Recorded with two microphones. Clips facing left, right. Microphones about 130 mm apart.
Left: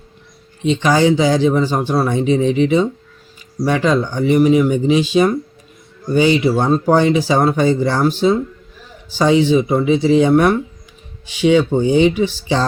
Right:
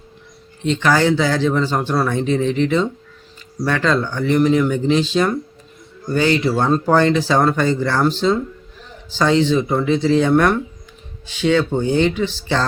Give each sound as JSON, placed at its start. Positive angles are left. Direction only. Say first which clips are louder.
{"t": 0.6, "sound": "speech", "louder": "left 2 dB", "side_deg": 15}